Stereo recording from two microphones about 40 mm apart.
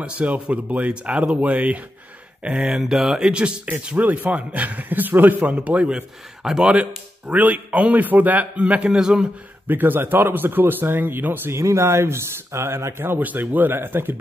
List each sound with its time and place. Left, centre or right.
0.0 s speech: right
2.8 s speech: centre
4.0 s a man's voice: right
5.5 s speech: right
8.5 s speech: right
8.9 s speech: centre
9.7 s speech: right
13.2 s a man's voice: right
13.7 s speech: right